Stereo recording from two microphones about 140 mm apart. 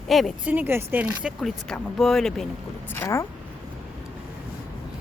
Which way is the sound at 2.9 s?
20° left (ahead or behind).